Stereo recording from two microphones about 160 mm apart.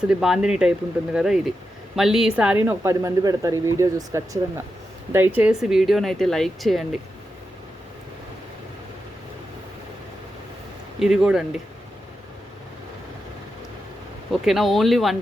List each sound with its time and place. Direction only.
0.1 s speech: 5° right (ahead or behind)
2.6 s speech: 20° right (ahead or behind); by 6.8 s centre (ahead or behind)
11.0 s speech: 5° right (ahead or behind)
14.4 s speech: centre (ahead or behind)